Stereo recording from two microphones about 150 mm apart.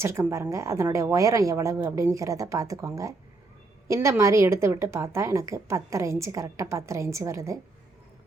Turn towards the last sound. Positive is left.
turn(degrees=-20)  # may be behind; listen again after turning